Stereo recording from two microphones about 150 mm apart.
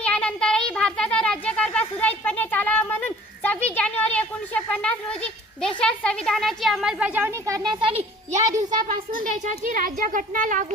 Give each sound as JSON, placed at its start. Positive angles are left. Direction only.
{"t": 0.0, "sound": "a sound", "side_deg": 5}
{"t": 5.6, "sound": "a woman's voice", "side_deg": 5}
{"t": 9.1, "sound": "speech", "side_deg": -60}